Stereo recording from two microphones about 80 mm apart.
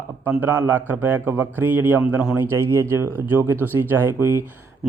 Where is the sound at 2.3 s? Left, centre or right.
Right.